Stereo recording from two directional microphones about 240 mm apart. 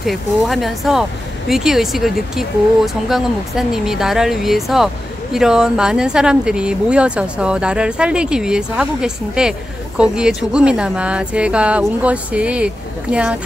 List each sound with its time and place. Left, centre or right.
0.0 s speech: centre